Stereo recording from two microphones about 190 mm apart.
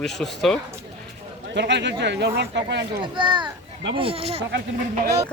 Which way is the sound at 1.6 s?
65° right (ahead or behind).